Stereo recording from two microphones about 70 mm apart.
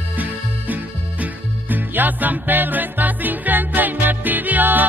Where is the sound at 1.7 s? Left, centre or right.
Right.